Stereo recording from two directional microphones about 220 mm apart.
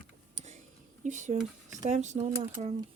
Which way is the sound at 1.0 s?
35° right (ahead or behind).